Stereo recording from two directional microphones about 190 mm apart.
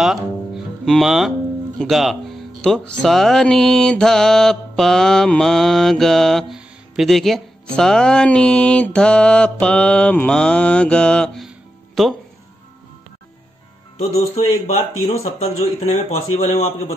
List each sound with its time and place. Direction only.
0.0 s music: centre (ahead or behind)
1.8 s speech: centre (ahead or behind)
13.9 s a man's voice: 35° left (ahead or behind)